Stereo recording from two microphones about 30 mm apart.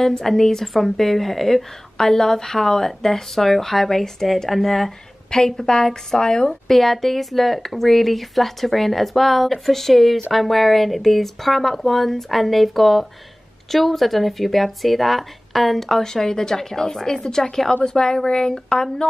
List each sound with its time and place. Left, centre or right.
0.2 s speech: centre
2.0 s speech: centre
5.3 s a woman's voice: left
6.7 s speech: centre
16.0 s a woman's voice: centre